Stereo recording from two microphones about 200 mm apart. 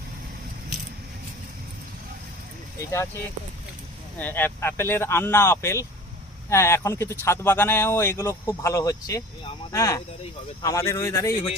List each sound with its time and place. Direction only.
4.2 s speech: 10° left (ahead or behind)